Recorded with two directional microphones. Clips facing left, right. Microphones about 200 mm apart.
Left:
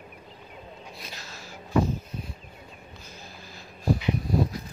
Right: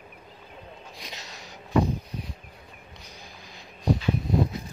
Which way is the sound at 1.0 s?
20° right (ahead or behind).